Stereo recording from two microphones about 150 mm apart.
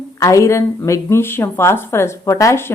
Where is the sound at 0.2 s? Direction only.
20° left (ahead or behind).